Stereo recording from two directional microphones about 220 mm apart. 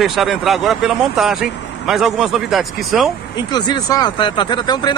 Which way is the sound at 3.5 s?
20° left (ahead or behind).